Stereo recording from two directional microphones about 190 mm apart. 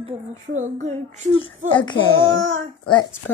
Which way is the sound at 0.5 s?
40° right (ahead or behind).